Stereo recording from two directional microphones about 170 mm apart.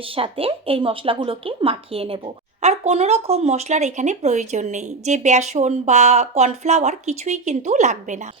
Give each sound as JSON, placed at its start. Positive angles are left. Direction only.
{"t": 0.2, "sound": "speech", "side_deg": -35}